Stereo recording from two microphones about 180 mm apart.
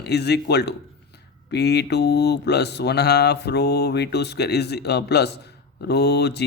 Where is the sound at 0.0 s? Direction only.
65° left (ahead or behind).